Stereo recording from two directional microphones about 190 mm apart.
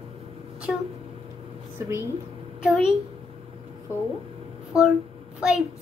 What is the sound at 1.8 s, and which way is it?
Speech, 15° right (ahead or behind).